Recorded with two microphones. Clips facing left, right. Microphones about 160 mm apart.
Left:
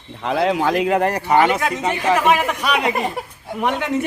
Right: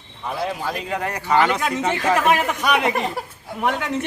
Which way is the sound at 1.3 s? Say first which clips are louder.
Even; 15° left (ahead or behind).